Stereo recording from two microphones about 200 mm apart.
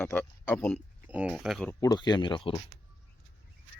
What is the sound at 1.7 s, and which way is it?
Speech, 15° left (ahead or behind).